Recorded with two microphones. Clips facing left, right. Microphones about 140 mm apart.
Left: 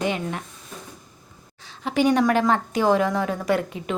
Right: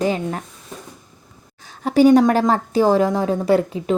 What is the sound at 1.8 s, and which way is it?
A woman's voice, 40° right (ahead or behind).